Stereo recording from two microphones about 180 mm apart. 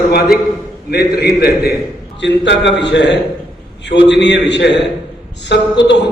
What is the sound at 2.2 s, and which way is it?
A man's voice, 75° left (ahead or behind).